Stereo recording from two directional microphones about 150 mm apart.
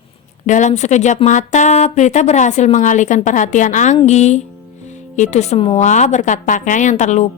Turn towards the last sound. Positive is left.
turn(degrees=50)  # may be behind; listen again after turning